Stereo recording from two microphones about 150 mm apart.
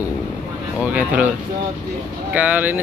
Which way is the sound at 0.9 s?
10° right (ahead or behind).